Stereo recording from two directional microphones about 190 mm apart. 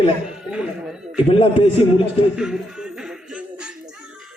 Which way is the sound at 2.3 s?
5° right (ahead or behind).